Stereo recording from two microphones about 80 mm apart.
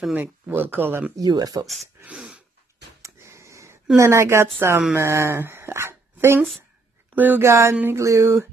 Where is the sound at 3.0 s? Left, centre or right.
Right.